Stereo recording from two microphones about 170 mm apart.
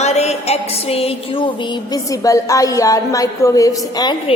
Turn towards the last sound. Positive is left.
turn(degrees=25)  # may be behind; listen again after turning